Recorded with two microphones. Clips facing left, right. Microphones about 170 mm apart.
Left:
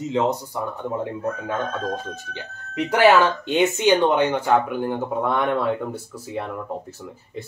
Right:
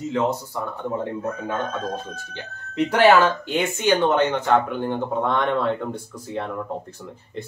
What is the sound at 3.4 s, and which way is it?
Speech, 20° left (ahead or behind).